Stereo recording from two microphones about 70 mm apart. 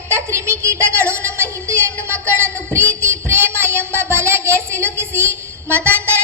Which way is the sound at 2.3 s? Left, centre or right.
Right.